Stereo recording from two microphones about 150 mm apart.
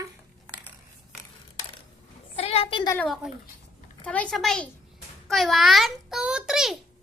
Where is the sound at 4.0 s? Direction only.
10° left (ahead or behind).